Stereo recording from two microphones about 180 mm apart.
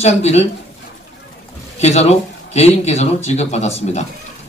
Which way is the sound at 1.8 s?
35° left (ahead or behind).